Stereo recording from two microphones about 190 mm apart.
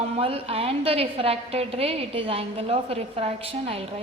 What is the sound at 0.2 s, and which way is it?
Music, 30° right (ahead or behind).